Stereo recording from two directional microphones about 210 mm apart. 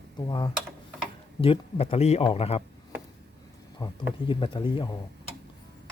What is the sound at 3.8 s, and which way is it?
Speech, 25° left (ahead or behind).